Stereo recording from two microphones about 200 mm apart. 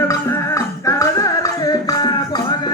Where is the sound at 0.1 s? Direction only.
15° left (ahead or behind).